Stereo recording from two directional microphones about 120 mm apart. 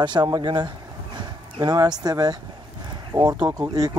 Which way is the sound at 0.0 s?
35° right (ahead or behind).